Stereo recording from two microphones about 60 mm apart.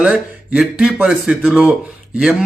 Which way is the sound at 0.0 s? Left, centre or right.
Centre.